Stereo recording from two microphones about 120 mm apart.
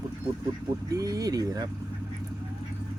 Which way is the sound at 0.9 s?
30° right (ahead or behind).